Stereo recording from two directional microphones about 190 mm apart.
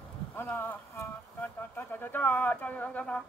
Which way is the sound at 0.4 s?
10° left (ahead or behind).